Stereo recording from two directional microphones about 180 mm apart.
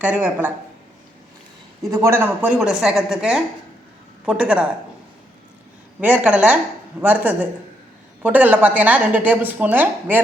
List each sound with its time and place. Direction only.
0.0 s a woman's voice: 10° right (ahead or behind)
1.8 s a woman's voice: 20° right (ahead or behind)
6.0 s a woman's voice: 10° right (ahead or behind)